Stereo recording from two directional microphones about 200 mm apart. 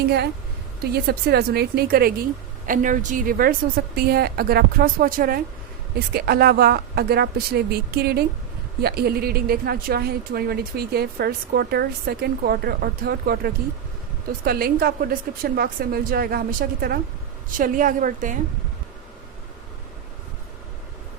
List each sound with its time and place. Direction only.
0.8 s a woman's voice: 50° right (ahead or behind)